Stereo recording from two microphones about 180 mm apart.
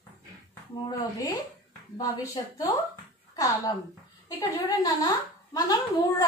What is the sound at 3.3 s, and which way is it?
A woman's voice, 20° left (ahead or behind).